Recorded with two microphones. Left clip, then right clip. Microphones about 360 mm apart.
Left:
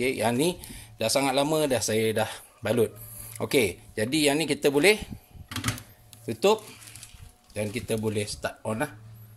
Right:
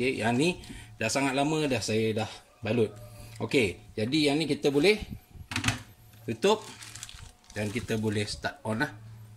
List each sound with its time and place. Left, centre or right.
0.0 s speech: centre
6.2 s speech: centre